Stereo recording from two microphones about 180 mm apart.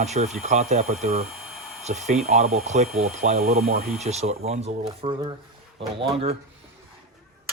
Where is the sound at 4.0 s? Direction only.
35° right (ahead or behind).